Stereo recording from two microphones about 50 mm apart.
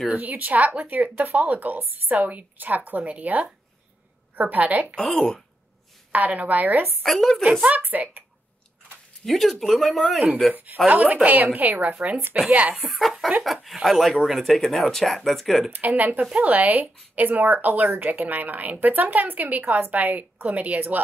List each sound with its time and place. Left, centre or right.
0.1 s speech: right
4.9 s a woman's voice: centre
6.1 s speech: right
7.0 s a woman's voice: centre
7.6 s speech: right
9.2 s speech: centre
10.5 s speech: right
12.8 s speech: centre
15.7 s speech: right